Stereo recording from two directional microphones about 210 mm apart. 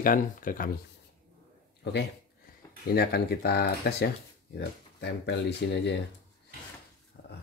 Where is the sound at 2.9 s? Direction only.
50° left (ahead or behind).